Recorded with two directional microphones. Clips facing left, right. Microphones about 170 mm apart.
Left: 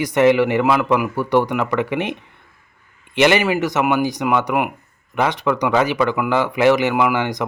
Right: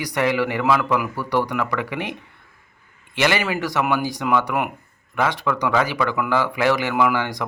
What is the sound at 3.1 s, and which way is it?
Speech, 20° left (ahead or behind).